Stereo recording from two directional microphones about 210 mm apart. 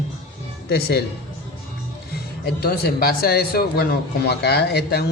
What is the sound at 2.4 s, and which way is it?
Speech, 45° left (ahead or behind).